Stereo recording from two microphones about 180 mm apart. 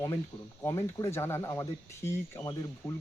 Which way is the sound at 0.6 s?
15° left (ahead or behind).